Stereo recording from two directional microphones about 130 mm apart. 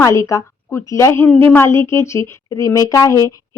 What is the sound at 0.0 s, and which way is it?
A woman's voice, 25° left (ahead or behind).